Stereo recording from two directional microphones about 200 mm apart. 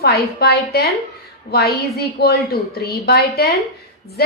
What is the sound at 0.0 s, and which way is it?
A woman's voice, 50° left (ahead or behind).